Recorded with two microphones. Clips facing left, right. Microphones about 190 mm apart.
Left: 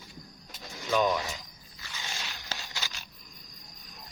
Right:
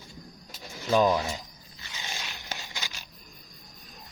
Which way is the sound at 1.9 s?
15° right (ahead or behind).